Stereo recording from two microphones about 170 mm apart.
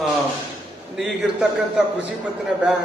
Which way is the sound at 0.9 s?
Centre (ahead or behind).